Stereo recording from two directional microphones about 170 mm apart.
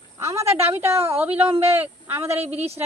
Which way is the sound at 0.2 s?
15° right (ahead or behind).